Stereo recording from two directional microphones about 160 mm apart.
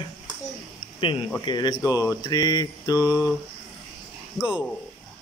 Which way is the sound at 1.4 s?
25° left (ahead or behind).